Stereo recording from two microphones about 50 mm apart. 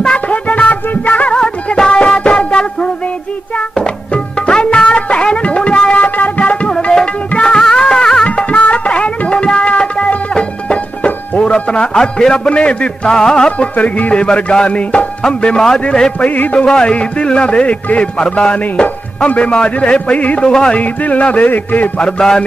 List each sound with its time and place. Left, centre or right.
0.0 s music: left
1.4 s music: centre
7.2 s music of bollywood: centre
8.3 s music: left
10.3 s a man's voice: left
16.3 s a man's voice: left
16.6 s a man's voice: centre; by 21.9 s left